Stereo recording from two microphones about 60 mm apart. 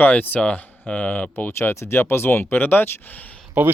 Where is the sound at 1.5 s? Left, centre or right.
Left.